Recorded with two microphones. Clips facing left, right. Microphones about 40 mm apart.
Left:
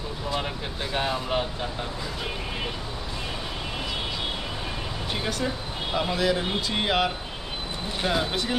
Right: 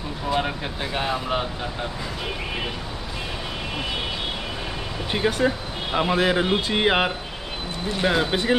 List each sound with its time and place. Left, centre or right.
0.3 s a sound: right
0.9 s speech: centre
5.1 s a man's voice: right